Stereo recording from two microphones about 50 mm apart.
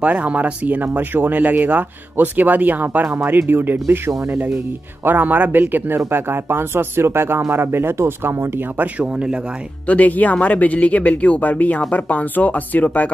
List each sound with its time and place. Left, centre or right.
0.0 s speech: right
9.0 s speech: right
9.8 s speech: left